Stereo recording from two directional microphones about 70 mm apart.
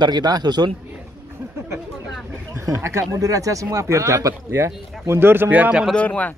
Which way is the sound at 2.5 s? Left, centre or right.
Right.